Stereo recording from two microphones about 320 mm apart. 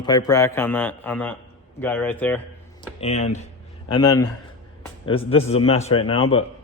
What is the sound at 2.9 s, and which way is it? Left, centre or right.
A man's voice, centre.